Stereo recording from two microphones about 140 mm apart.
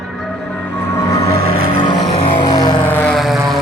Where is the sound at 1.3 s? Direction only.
90° right.